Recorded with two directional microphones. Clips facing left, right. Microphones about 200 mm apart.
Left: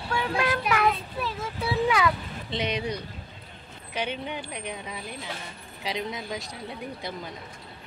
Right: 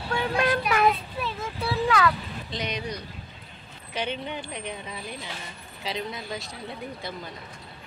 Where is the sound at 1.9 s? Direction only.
15° left (ahead or behind).